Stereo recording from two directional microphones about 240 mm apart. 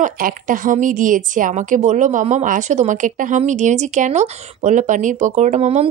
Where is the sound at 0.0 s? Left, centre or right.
Right.